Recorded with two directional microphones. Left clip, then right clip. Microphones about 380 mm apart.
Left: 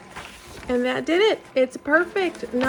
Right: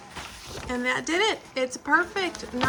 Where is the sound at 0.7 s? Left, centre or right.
Centre.